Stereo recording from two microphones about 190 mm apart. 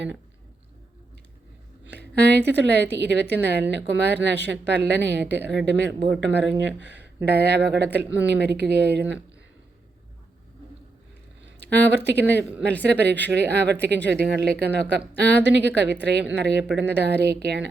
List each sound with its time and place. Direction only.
2.0 s a woman's voice: 65° right (ahead or behind)
11.6 s a woman's voice: 60° right (ahead or behind)